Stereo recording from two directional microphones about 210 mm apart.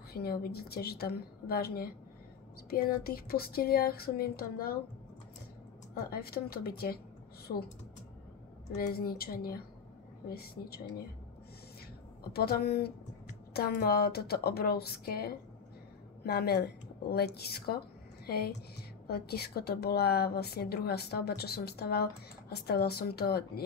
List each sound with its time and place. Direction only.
0.1 s a woman's voice: 45° left (ahead or behind)
6.0 s a woman's voice: 45° left (ahead or behind)
8.7 s a woman's voice: 45° left (ahead or behind)
12.2 s a woman's voice: 50° left (ahead or behind)